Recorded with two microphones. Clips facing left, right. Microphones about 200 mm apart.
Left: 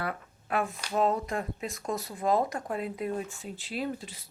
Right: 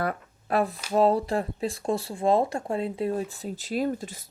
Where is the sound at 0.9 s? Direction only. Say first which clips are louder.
Right 6 dB; 35° right (ahead or behind).